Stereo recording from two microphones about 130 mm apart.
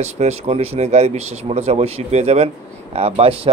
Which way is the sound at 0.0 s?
55° right (ahead or behind).